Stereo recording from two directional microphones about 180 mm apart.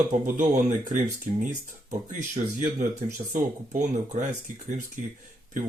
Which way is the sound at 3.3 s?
45° right (ahead or behind).